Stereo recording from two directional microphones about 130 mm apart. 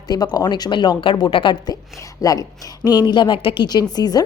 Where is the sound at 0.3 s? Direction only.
30° left (ahead or behind).